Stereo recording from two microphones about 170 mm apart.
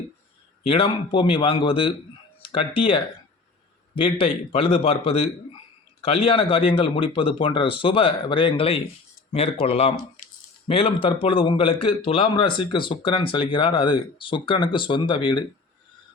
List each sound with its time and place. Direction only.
0.6 s a man's voice: 30° left (ahead or behind)